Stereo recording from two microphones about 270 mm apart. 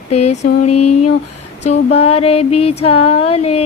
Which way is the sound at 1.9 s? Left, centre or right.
Left.